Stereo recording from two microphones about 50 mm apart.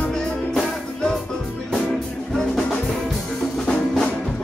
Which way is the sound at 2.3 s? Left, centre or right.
Centre.